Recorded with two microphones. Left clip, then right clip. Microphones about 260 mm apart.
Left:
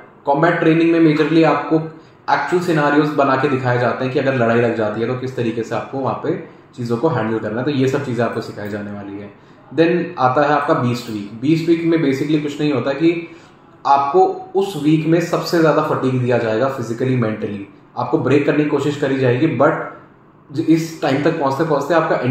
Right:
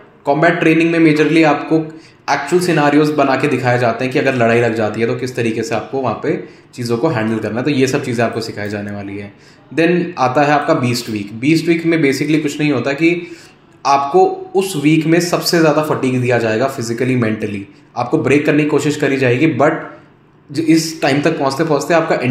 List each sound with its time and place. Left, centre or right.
0.2 s speech: right
9.8 s speech: right